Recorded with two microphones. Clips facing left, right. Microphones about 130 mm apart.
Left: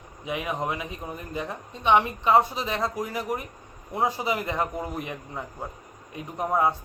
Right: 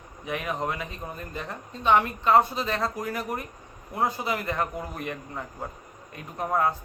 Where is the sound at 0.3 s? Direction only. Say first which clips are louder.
Left 1 dB; 15° left (ahead or behind).